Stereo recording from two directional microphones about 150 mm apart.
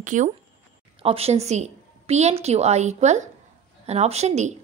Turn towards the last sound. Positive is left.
turn(degrees=-50)  # may be behind; listen again after turning